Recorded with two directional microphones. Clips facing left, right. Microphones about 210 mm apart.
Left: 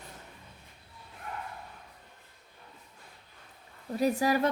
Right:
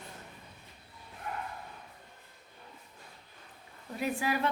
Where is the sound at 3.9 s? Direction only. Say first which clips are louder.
Left 6 dB; 40° left (ahead or behind).